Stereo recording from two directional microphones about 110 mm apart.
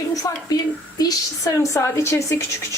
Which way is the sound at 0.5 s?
35° left (ahead or behind).